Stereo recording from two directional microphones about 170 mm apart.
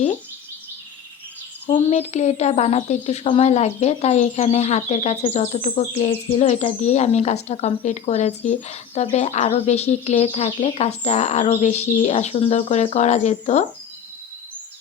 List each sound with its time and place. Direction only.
1.9 s speech: 40° left (ahead or behind)